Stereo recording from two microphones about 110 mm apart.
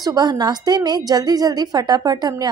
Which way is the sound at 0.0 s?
40° right (ahead or behind).